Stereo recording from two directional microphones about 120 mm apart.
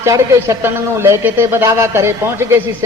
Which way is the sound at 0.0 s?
25° right (ahead or behind).